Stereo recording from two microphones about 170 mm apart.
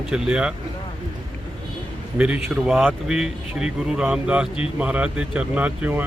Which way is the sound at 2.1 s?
5° right (ahead or behind).